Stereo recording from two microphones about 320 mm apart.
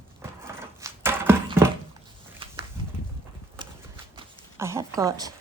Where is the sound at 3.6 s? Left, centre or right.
Centre.